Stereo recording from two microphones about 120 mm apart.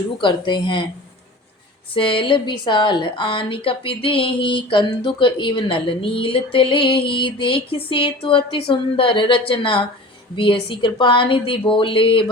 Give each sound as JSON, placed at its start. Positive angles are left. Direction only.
{"t": 0.2, "sound": "a woman's voice", "side_deg": 40}
{"t": 1.9, "sound": "a woman's voice", "side_deg": 45}